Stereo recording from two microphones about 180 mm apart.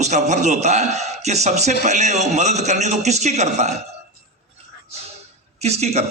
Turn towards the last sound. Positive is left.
turn(degrees=-35)  # may be behind; listen again after turning